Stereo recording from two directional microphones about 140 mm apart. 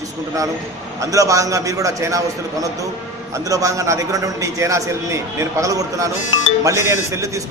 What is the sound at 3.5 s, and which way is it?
A man's voice, 25° right (ahead or behind).